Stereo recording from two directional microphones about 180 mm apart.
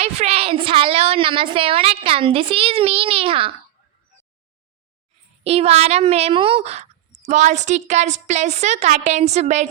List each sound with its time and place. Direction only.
0.0 s a woman's voice: 35° right (ahead or behind)
5.4 s speech: 35° right (ahead or behind)